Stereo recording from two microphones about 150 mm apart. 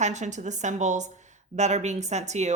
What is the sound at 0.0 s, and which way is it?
A woman's voice, 50° right (ahead or behind).